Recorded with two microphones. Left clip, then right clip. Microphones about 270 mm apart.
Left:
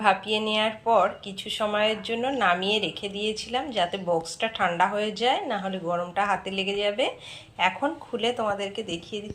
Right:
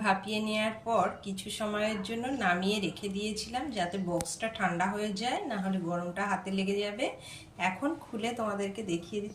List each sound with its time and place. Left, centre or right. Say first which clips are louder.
0.0 s a woman's voice: left 7 dB; centre